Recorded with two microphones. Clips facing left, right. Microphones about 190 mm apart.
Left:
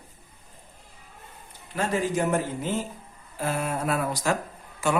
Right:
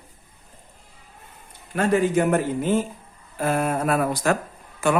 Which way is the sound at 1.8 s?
60° right (ahead or behind).